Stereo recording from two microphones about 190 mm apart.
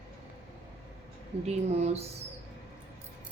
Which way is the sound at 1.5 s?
35° right (ahead or behind).